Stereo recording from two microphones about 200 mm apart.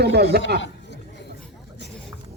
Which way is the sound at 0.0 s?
55° right (ahead or behind).